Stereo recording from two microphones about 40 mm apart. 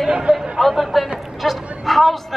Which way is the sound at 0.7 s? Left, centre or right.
Centre.